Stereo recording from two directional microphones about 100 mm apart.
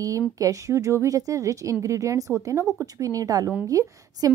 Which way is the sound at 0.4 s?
35° right (ahead or behind).